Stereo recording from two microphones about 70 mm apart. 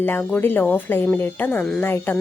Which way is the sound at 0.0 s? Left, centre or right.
Left.